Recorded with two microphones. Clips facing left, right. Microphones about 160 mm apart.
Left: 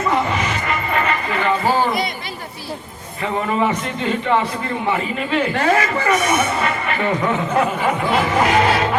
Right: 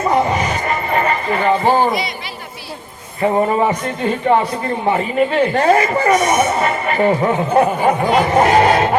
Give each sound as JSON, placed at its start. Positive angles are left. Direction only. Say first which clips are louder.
{"t": 0.0, "sound": "music", "louder": "right 4 dB", "side_deg": -35}
{"t": 1.6, "sound": "a sound", "louder": "right 4 dB", "side_deg": -50}
{"t": 3.2, "sound": "speech", "louder": "right 6 dB", "side_deg": -35}
{"t": 4.9, "sound": "speech", "louder": "right 6 dB", "side_deg": -30}